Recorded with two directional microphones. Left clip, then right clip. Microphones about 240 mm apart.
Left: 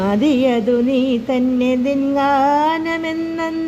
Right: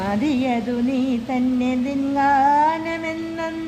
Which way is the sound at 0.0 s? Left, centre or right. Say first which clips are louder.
Left 6 dB; centre.